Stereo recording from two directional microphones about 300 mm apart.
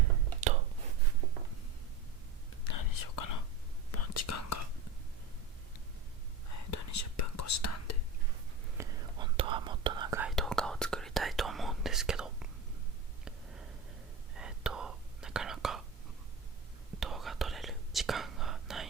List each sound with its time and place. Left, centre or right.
2.9 s whispering: left
3.9 s whispering: left
6.5 s whispering: left
8.8 s whispering: centre
14.3 s whispering: centre
17.0 s whispering: centre